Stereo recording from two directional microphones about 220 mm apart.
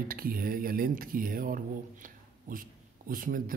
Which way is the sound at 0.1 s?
40° right (ahead or behind).